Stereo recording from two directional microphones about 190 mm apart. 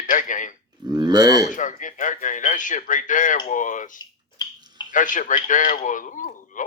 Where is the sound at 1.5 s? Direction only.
40° left (ahead or behind).